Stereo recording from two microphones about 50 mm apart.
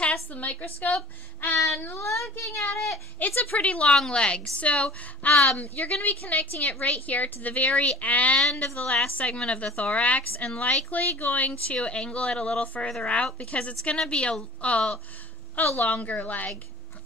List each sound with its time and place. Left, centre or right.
0.3 s a woman's voice: left
2.0 s a woman's voice: left
2.3 s speech: left
3.2 s a woman's voice: left
3.5 s a woman's voice: left